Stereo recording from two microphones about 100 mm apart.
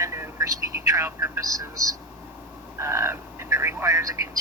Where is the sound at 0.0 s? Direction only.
30° right (ahead or behind).